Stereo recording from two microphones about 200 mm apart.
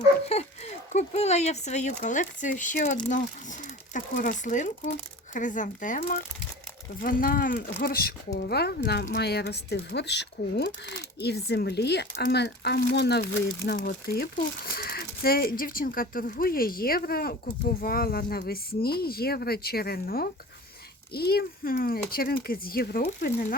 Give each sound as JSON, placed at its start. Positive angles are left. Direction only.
{"t": 0.3, "sound": "speech", "side_deg": 30}